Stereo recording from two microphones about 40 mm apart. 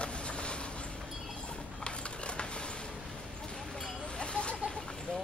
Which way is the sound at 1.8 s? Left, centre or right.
Left.